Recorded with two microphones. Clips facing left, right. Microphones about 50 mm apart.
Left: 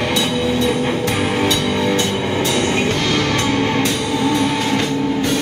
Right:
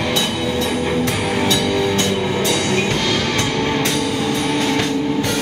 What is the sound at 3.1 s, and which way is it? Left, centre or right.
Music, left.